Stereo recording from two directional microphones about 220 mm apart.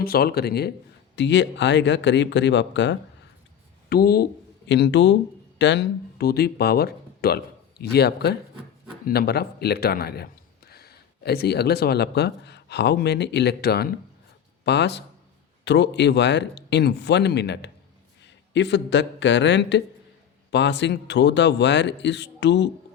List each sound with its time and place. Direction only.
0.0 s a man's voice: 45° left (ahead or behind)
3.8 s a man's voice: 45° left (ahead or behind)